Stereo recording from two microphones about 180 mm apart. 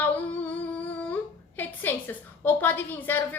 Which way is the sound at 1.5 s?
10° left (ahead or behind).